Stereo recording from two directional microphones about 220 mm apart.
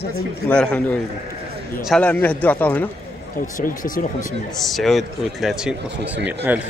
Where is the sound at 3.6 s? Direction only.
40° left (ahead or behind).